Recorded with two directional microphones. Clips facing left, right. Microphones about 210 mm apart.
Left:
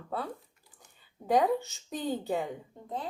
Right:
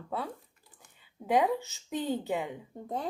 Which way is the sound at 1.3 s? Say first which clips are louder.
Left 1 dB; centre (ahead or behind).